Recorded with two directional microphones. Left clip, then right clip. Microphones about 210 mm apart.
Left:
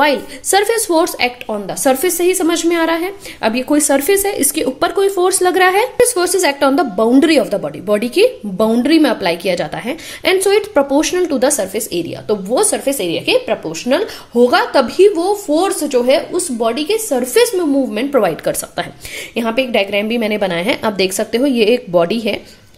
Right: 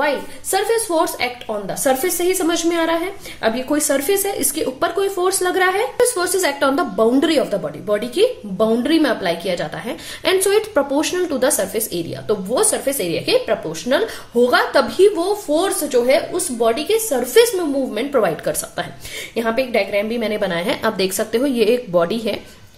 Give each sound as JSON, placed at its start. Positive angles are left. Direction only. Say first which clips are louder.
{"t": 0.0, "sound": "a woman's voice", "louder": "left 6 dB", "side_deg": 40}